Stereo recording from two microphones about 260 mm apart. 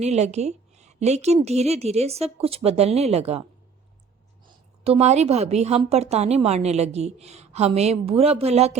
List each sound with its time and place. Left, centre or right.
0.0 s a woman's voice: right
4.8 s a woman's voice: right